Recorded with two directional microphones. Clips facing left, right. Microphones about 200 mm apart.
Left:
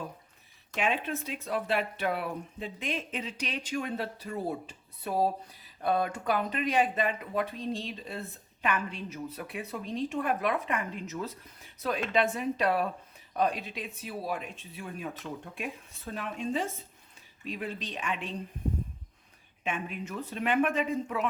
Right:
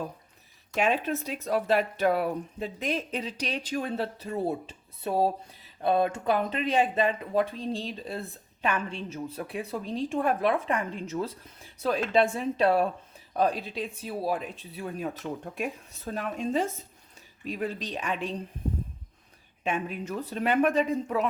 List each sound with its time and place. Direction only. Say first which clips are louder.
0.7 s speech: right 4 dB; 40° right (ahead or behind)
19.6 s speech: right 4 dB; 40° right (ahead or behind)